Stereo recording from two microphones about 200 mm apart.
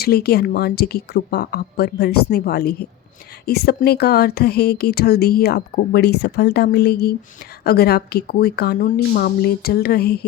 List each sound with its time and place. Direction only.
0.0 s speech: 50° left (ahead or behind)